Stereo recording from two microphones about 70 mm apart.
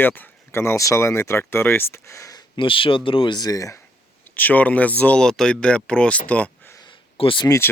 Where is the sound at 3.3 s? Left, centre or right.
Left.